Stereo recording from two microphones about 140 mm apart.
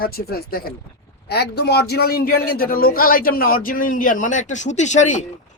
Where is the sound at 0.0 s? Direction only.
90° left.